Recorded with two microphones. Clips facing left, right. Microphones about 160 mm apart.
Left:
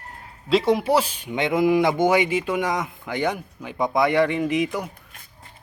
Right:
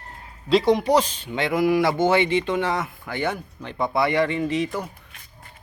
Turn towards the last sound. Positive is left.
turn(degrees=10)  # may be behind; listen again after turning